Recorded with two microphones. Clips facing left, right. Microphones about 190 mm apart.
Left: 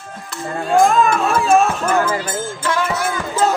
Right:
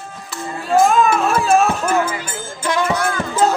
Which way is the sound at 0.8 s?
5° right (ahead or behind).